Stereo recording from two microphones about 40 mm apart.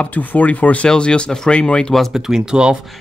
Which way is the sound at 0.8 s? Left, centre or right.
Left.